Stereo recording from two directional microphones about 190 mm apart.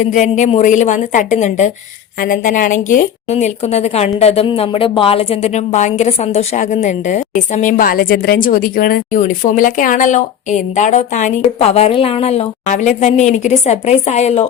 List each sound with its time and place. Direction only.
0.0 s a woman's voice: 40° left (ahead or behind)